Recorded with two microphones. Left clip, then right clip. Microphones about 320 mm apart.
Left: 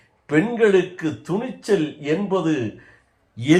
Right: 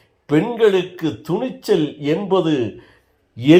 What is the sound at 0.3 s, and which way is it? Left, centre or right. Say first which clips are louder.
A man's voice: right 2 dB; centre.